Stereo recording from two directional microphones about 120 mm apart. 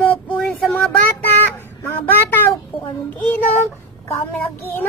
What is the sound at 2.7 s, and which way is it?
Child singing, 45° left (ahead or behind).